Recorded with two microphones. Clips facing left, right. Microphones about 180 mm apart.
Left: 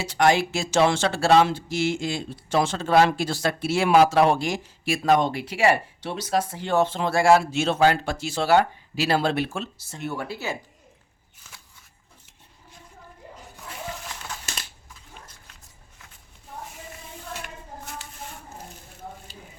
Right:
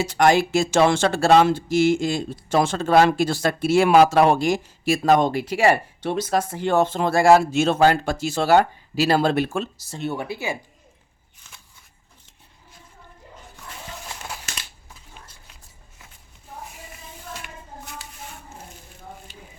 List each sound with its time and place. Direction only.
0.0 s speech: 50° right (ahead or behind)
10.0 s speech: 20° right (ahead or behind)